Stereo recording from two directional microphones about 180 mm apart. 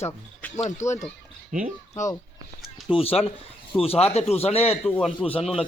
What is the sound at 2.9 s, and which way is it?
Speech, 35° left (ahead or behind).